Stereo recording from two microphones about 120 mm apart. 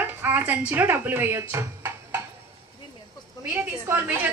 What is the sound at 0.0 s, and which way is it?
Music, 15° right (ahead or behind).